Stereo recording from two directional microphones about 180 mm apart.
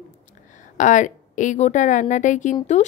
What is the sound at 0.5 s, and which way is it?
A woman's voice, 45° left (ahead or behind).